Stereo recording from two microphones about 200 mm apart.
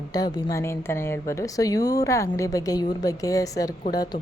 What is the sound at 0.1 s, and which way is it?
A woman's voice, 20° left (ahead or behind).